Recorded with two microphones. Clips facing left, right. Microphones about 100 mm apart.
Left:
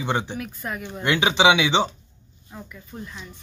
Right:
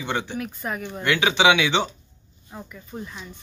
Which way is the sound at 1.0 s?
25° left (ahead or behind).